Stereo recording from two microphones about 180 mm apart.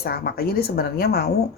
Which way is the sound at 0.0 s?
60° left (ahead or behind).